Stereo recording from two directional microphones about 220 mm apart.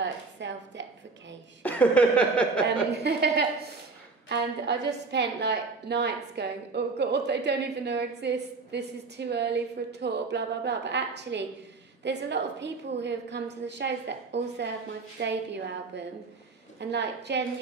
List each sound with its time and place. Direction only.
0.0 s a woman's voice: 55° right (ahead or behind)
1.6 s speech: 5° left (ahead or behind)
3.0 s a woman's voice: 50° right (ahead or behind)
15.1 s a woman's voice: 50° right (ahead or behind)